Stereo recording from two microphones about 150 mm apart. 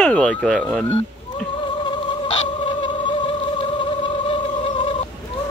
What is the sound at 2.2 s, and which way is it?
Fowl, 35° left (ahead or behind).